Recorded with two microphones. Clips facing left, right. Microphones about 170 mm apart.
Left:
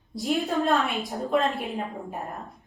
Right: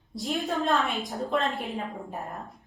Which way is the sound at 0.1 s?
Centre (ahead or behind).